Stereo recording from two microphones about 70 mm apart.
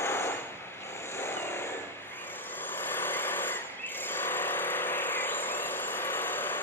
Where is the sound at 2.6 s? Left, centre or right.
Left.